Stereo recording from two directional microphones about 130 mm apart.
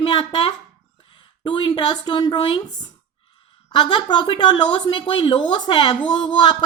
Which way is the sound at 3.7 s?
35° left (ahead or behind).